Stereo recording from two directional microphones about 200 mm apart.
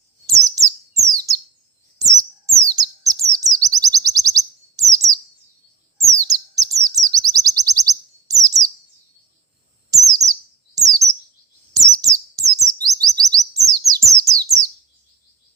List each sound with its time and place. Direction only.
0.9 s bird: 15° right (ahead or behind)
2.0 s chirp: 15° right (ahead or behind)
9.9 s bird: 15° right (ahead or behind)
10.8 s chirp: 15° right (ahead or behind)
11.7 s bird: 15° right (ahead or behind)